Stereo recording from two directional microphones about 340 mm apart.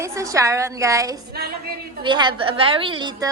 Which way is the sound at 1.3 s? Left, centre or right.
Right.